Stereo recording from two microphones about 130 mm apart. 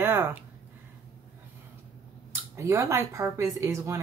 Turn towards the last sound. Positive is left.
turn(degrees=-25)  # may be behind; listen again after turning